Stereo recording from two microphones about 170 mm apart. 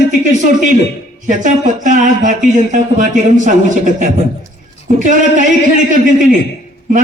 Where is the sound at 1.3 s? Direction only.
50° right (ahead or behind).